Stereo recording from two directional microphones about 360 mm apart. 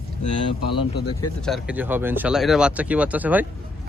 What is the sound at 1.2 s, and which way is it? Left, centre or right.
Speech, centre.